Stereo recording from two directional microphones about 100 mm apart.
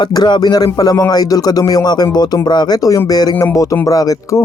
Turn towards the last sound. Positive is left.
turn(degrees=35)  # may be behind; listen again after turning